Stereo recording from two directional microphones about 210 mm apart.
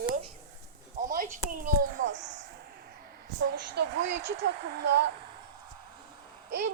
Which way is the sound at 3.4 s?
55° right (ahead or behind).